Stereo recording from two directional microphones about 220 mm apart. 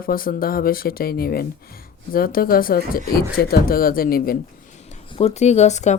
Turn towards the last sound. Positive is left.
turn(degrees=30)  # may be behind; listen again after turning